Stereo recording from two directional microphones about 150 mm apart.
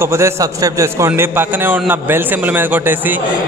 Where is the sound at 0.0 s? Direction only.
20° right (ahead or behind).